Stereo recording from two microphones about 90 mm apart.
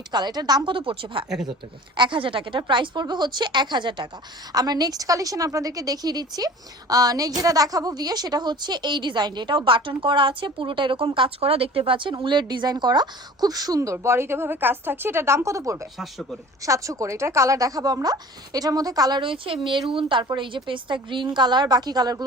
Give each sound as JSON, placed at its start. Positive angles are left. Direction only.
{"t": 0.1, "sound": "a woman's voice", "side_deg": -50}
{"t": 0.7, "sound": "speech", "side_deg": -70}
{"t": 4.5, "sound": "a woman's voice", "side_deg": -45}
{"t": 16.0, "sound": "speech", "side_deg": 0}
{"t": 16.6, "sound": "speech", "side_deg": -35}
{"t": 19.2, "sound": "speech", "side_deg": -75}